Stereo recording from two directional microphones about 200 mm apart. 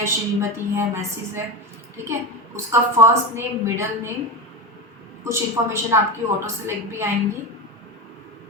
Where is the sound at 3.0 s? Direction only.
15° right (ahead or behind).